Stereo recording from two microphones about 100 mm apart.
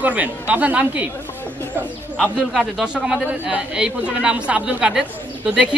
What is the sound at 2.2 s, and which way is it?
A man's voice, centre (ahead or behind).